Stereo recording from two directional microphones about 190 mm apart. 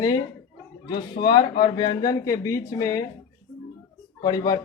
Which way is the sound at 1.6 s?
25° left (ahead or behind).